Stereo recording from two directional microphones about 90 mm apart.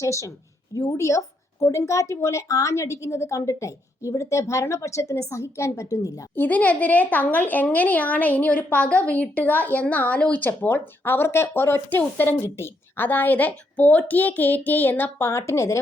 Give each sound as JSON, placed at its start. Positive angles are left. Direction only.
{"t": 0.0, "sound": "a woman's voice", "side_deg": 35}
{"t": 6.3, "sound": "a woman's voice", "side_deg": 20}